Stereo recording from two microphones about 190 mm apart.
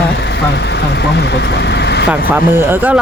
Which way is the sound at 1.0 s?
60° left (ahead or behind).